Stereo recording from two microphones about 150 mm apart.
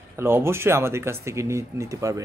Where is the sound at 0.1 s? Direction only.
15° right (ahead or behind).